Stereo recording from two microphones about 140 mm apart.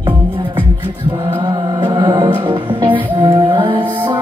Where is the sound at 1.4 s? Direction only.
35° right (ahead or behind).